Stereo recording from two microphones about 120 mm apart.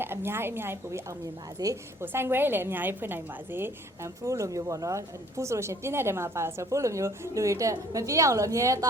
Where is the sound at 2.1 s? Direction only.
20° right (ahead or behind).